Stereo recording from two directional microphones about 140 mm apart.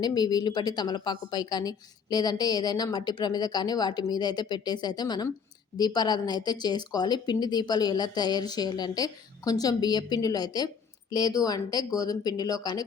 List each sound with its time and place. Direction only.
0.0 s a woman's voice: 30° left (ahead or behind)